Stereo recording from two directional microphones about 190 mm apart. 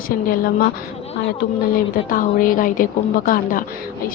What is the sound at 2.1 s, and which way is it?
Speech, 45° left (ahead or behind).